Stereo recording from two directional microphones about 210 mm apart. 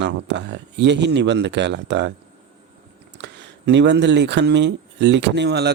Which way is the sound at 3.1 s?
55° right (ahead or behind).